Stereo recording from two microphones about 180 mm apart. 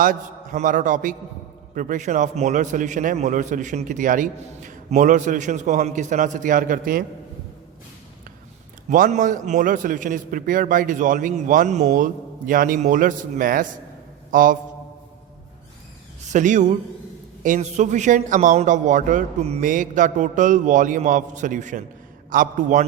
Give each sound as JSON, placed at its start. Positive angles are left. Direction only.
{"t": 0.0, "sound": "a man's voice", "side_deg": -50}
{"t": 8.9, "sound": "a man's voice", "side_deg": -45}
{"t": 16.3, "sound": "a man's voice", "side_deg": -45}